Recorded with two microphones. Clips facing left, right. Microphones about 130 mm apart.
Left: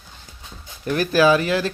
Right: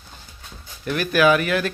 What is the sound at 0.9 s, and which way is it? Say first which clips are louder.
Speech: left 1 dB; 35° left (ahead or behind).